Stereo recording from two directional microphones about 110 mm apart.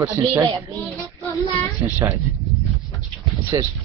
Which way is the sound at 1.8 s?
30° right (ahead or behind).